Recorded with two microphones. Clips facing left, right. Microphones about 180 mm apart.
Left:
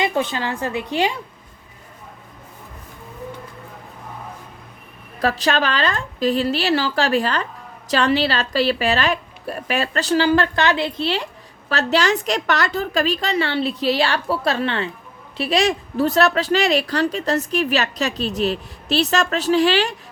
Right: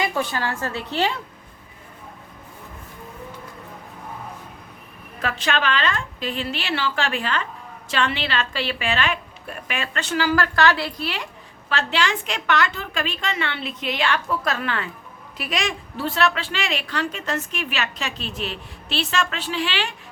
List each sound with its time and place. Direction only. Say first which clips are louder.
0.0 s a woman's voice: left 3 dB; 20° left (ahead or behind)
5.2 s a woman's voice: left 5 dB; 35° left (ahead or behind)
11.7 s a woman's voice: left 5 dB; 40° left (ahead or behind)